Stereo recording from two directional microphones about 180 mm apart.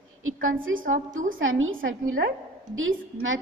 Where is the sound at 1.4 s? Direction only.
90° right.